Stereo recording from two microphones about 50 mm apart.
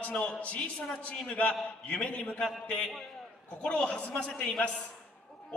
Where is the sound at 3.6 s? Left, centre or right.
Left.